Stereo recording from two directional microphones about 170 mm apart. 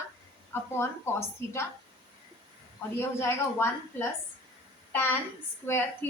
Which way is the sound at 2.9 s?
15° left (ahead or behind).